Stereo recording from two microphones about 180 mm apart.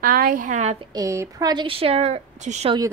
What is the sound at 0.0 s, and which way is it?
Speech, 50° right (ahead or behind).